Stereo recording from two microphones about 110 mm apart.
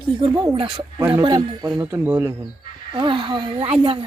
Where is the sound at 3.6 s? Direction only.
65° right (ahead or behind).